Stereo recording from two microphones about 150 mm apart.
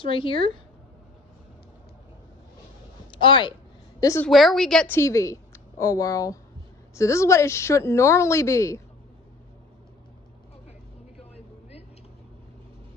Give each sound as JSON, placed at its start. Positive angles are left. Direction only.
{"t": 0.0, "sound": "a woman's voice", "side_deg": 35}
{"t": 3.1, "sound": "speech", "side_deg": 30}
{"t": 4.0, "sound": "a woman's voice", "side_deg": 20}
{"t": 4.3, "sound": "a woman's voice", "side_deg": 0}
{"t": 4.8, "sound": "a woman's voice", "side_deg": 15}